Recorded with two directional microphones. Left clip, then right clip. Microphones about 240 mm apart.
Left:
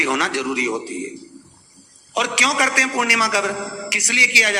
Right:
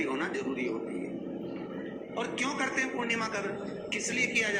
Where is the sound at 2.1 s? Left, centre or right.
Left.